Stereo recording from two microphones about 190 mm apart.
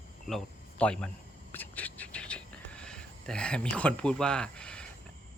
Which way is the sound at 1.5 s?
10° left (ahead or behind).